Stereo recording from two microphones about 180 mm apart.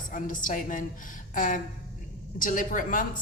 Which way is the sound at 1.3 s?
45° left (ahead or behind).